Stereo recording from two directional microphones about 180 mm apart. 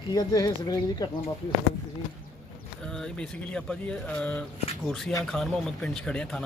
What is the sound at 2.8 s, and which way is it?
Speech, 5° left (ahead or behind).